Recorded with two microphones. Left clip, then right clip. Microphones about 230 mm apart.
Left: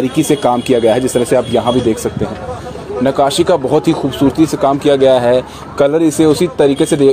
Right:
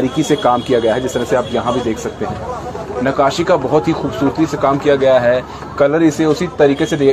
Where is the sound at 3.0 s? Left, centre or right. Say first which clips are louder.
Left 2 dB; left.